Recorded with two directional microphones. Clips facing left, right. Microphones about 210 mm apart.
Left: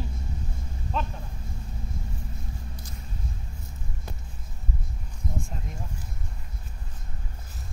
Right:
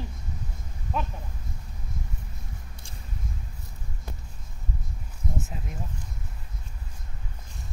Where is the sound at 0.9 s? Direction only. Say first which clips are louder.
Even; 10° right (ahead or behind).